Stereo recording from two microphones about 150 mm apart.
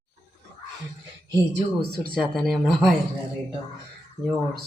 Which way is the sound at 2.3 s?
Centre (ahead or behind).